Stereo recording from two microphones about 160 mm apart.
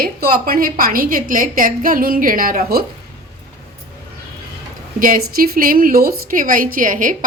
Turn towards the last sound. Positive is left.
turn(degrees=-55)  # may be behind; listen again after turning